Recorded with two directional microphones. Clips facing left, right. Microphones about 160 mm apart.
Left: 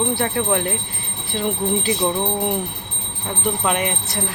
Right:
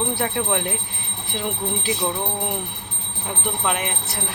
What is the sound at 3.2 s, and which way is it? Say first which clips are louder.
Speech: left 3 dB; 5° right (ahead or behind).